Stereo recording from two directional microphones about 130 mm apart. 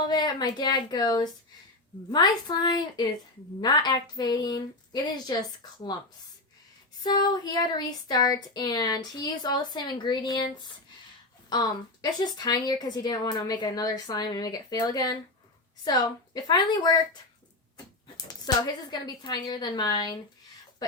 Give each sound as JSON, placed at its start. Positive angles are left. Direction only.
{"t": 0.1, "sound": "speech", "side_deg": 35}
{"t": 7.0, "sound": "speech", "side_deg": 30}
{"t": 12.0, "sound": "speech", "side_deg": 30}
{"t": 18.3, "sound": "speech", "side_deg": 30}